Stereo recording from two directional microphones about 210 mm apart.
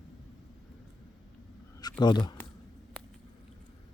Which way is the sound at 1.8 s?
20° left (ahead or behind).